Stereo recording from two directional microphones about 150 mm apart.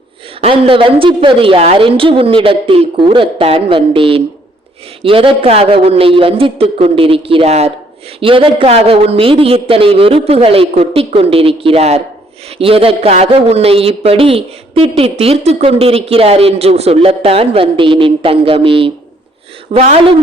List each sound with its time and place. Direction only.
0.4 s a man's voice: 40° right (ahead or behind)